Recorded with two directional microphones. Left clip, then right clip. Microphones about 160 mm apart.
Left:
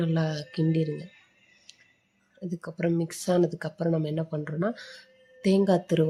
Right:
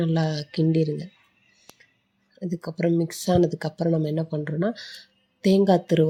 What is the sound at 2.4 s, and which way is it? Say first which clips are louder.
Speech: right 4 dB; 25° right (ahead or behind).